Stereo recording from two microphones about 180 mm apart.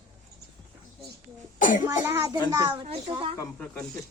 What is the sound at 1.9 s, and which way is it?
Speech, 15° right (ahead or behind).